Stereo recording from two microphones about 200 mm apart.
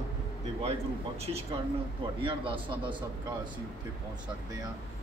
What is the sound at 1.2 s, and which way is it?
A man's voice, 30° right (ahead or behind).